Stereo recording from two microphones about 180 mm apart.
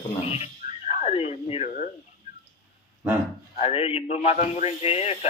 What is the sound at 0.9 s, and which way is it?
Speech, 40° left (ahead or behind).